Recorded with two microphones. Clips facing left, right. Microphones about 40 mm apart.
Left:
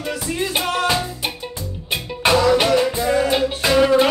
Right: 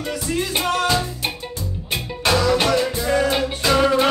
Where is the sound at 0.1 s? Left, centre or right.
Left.